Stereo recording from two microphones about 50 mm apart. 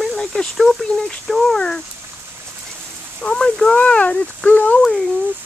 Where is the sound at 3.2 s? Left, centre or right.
Centre.